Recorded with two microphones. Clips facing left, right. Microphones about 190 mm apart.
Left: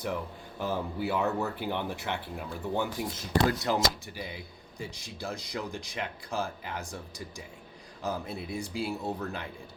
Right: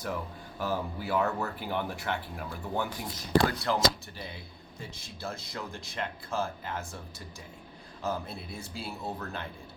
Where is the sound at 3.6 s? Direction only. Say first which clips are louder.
Right 1 dB; 20° left (ahead or behind).